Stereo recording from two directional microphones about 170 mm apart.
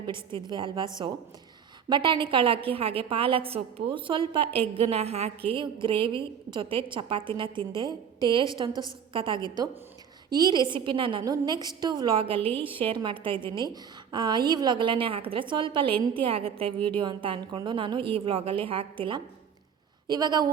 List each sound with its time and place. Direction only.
0.0 s a woman's voice: 30° right (ahead or behind)
1.9 s a woman's voice: 30° right (ahead or behind)
7.4 s a woman's voice: 15° left (ahead or behind)
7.7 s a woman's voice: 25° right (ahead or behind)